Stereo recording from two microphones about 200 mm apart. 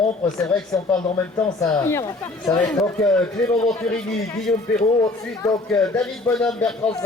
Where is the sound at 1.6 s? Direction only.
15° left (ahead or behind).